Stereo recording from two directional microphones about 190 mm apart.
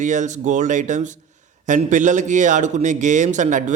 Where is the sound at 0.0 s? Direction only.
40° right (ahead or behind).